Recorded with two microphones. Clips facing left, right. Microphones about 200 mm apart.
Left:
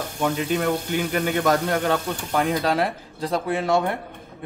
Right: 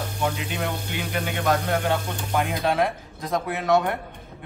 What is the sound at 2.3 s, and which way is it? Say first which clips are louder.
Speech: left 1 dB; 40° left (ahead or behind).